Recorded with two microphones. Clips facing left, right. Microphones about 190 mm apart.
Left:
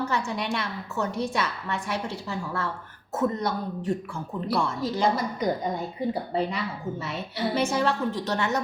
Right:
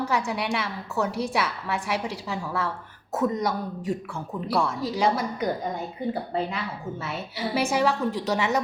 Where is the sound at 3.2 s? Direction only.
10° right (ahead or behind).